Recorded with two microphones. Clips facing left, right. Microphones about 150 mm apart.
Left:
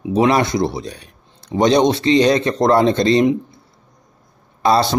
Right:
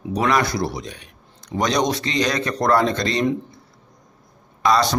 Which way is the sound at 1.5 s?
25° left (ahead or behind).